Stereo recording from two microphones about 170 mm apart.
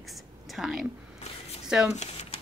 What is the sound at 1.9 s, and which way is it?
Speech, 40° left (ahead or behind).